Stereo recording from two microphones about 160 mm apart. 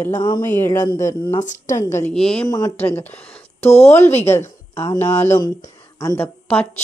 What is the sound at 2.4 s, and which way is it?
Speech, 25° left (ahead or behind).